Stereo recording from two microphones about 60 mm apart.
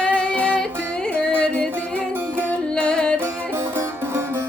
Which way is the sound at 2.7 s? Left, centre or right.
Centre.